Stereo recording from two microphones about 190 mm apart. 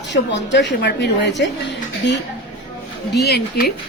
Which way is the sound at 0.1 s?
70° left (ahead or behind).